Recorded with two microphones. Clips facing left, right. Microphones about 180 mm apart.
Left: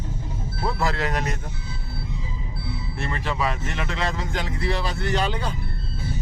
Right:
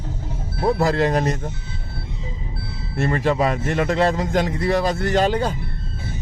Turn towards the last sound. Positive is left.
turn(degrees=-45)  # may be behind; listen again after turning